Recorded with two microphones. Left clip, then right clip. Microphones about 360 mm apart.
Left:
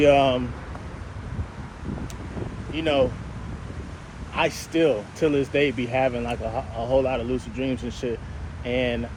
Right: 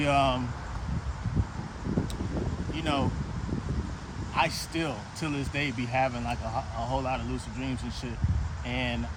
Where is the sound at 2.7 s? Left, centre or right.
Right.